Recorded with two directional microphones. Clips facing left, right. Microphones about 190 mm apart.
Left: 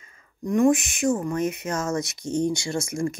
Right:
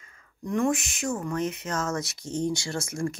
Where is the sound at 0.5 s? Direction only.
20° left (ahead or behind).